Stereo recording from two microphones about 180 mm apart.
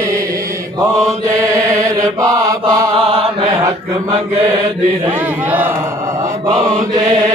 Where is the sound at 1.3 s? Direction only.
15° right (ahead or behind).